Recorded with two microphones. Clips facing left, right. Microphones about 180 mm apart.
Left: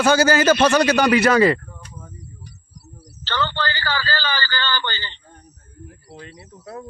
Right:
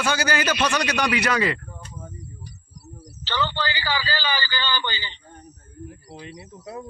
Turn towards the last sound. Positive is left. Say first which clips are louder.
# right 1 dB
turn(degrees=-15)  # may be behind; listen again after turning